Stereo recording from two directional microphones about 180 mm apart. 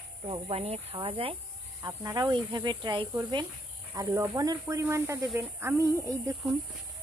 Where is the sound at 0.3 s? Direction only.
35° right (ahead or behind).